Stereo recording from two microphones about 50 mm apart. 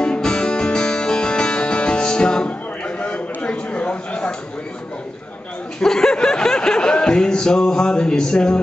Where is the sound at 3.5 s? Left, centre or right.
Left.